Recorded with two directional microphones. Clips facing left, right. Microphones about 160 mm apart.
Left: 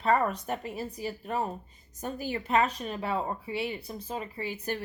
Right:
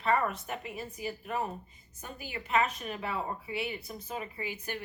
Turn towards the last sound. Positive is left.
turn(degrees=35)  # may be behind; listen again after turning